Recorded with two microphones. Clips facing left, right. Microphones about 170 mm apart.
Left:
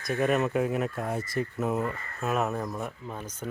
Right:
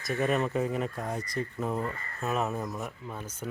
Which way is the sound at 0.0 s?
Centre (ahead or behind).